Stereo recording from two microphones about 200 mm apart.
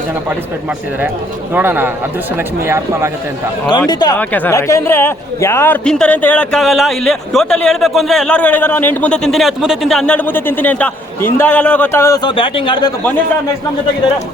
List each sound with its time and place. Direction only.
1.5 s speech: 10° right (ahead or behind)
3.7 s speech: 20° left (ahead or behind)
4.2 s a man's voice: 10° left (ahead or behind); by 12.9 s 25° left (ahead or behind)